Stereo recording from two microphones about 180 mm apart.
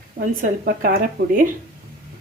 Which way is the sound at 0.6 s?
55° right (ahead or behind).